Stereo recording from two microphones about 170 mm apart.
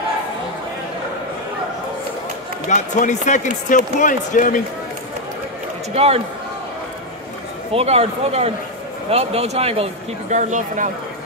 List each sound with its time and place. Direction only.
2.7 s speech: 45° left (ahead or behind)
5.9 s speech: 35° right (ahead or behind)
7.7 s speech: 35° right (ahead or behind)
10.3 s speech: 45° right (ahead or behind)